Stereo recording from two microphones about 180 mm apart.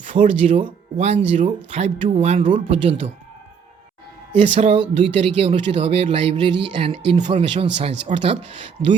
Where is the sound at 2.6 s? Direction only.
35° right (ahead or behind).